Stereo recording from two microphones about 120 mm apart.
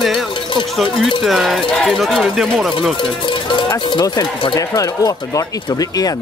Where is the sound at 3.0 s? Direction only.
45° left (ahead or behind).